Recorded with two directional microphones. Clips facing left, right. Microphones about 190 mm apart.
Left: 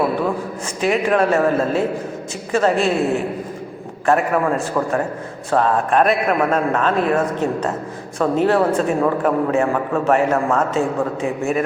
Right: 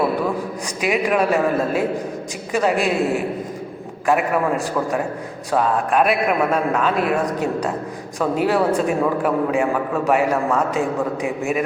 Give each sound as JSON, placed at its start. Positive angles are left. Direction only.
{"t": 0.8, "sound": "a man's voice", "side_deg": -10}
{"t": 4.0, "sound": "a man's voice", "side_deg": -10}